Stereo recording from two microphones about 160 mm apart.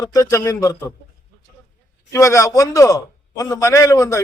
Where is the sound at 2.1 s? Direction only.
20° left (ahead or behind).